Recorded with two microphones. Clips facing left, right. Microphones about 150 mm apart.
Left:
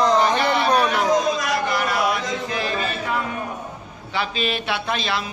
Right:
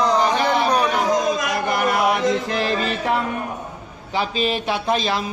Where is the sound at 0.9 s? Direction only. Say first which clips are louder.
Even; 45° right (ahead or behind); by 3.1 s 80° right.